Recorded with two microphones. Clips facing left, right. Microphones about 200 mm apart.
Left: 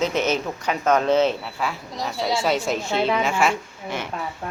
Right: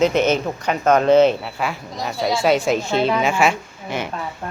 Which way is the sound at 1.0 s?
Centre (ahead or behind).